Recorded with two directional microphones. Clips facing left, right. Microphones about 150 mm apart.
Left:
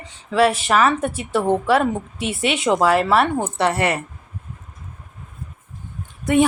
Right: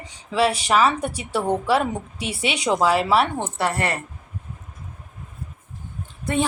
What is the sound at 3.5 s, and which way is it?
Speech, 20° left (ahead or behind).